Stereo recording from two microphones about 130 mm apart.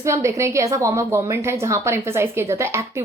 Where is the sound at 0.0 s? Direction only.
20° right (ahead or behind).